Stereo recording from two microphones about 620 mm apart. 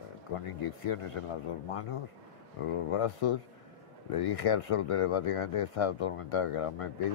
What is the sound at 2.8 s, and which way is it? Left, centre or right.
Speech, left.